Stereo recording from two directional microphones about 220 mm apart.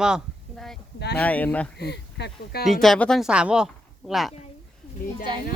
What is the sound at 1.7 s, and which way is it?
Speech, 50° left (ahead or behind).